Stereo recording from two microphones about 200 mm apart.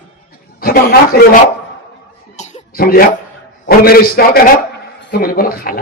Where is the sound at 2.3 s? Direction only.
40° left (ahead or behind).